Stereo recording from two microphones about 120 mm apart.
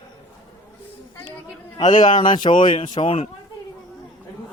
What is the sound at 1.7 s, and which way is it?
Speech, 75° left (ahead or behind).